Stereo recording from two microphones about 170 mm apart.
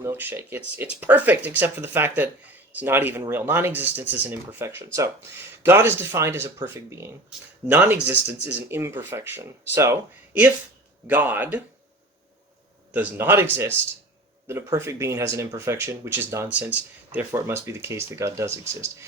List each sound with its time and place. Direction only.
0.0 s speech: 10° right (ahead or behind)
12.9 s speech: 10° right (ahead or behind)